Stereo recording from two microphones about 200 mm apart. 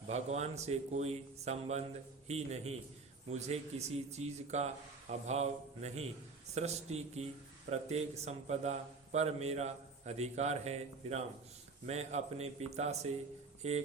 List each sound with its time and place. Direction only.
0.1 s a man's voice: 35° right (ahead or behind)